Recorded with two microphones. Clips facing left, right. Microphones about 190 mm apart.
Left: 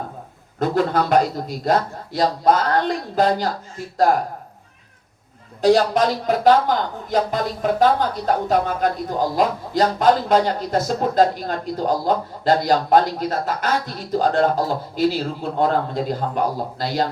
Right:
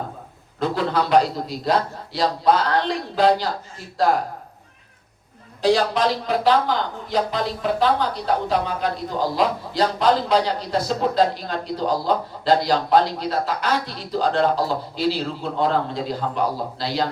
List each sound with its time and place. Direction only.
0.6 s speech: 50° left (ahead or behind)
5.6 s speech: 45° left (ahead or behind)